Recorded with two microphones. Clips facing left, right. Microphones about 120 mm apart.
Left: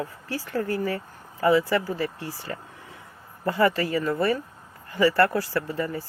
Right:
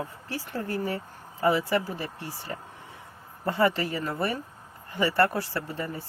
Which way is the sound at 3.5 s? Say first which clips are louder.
Left 3 dB; 20° right (ahead or behind).